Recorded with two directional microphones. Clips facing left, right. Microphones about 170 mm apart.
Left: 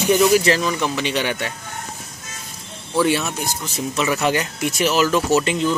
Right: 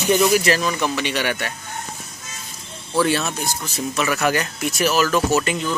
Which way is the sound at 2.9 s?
15° left (ahead or behind).